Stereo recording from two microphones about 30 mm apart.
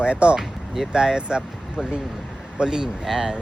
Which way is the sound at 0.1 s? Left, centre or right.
Right.